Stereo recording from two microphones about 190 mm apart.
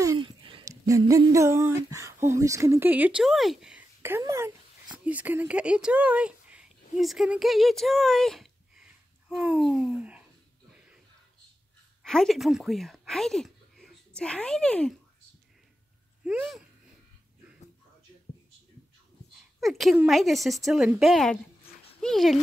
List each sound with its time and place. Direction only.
0.0 s a sound: 20° right (ahead or behind)
1.9 s speech: 15° right (ahead or behind)
10.7 s a sound: 5° right (ahead or behind)
12.0 s speech: centre (ahead or behind)
16.3 s speech: 5° right (ahead or behind)
19.6 s speech: centre (ahead or behind)